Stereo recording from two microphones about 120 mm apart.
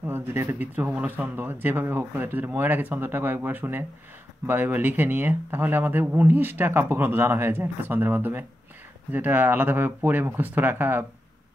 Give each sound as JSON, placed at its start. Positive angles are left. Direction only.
{"t": 0.0, "sound": "speech", "side_deg": -20}